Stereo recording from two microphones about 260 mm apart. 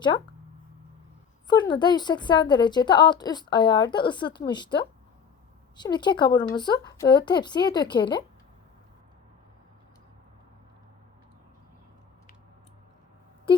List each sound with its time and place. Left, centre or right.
1.5 s a woman's voice: centre